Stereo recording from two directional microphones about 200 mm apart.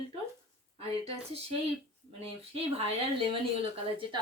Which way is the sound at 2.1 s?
30° right (ahead or behind).